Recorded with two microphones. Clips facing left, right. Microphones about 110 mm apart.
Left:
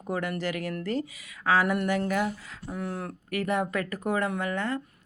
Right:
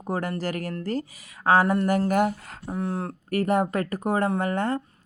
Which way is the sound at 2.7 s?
30° right (ahead or behind).